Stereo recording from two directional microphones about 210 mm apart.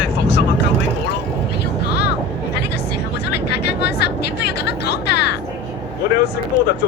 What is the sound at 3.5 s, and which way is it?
Vehicle, 55° left (ahead or behind).